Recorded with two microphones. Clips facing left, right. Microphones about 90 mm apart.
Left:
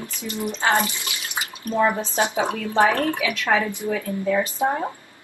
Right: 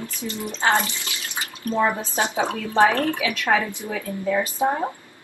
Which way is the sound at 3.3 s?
15° right (ahead or behind).